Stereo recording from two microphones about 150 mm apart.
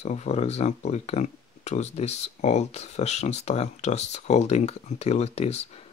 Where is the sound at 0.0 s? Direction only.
50° left (ahead or behind).